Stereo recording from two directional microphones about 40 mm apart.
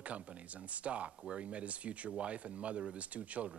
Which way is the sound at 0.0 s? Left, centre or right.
Right.